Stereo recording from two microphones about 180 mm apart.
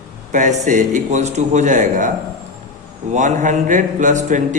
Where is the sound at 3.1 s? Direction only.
40° right (ahead or behind).